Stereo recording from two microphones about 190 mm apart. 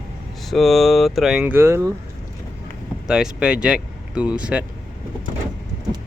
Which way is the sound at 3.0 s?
5° right (ahead or behind).